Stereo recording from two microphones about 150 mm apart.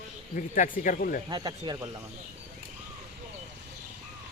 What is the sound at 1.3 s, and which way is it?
Speech, 30° right (ahead or behind).